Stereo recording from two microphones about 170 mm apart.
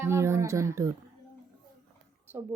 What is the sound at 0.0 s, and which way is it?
Speech, 15° right (ahead or behind).